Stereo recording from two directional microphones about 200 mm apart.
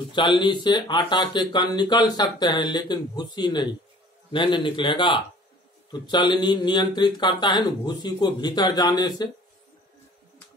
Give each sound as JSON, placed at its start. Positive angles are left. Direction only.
{"t": 0.1, "sound": "speech", "side_deg": 25}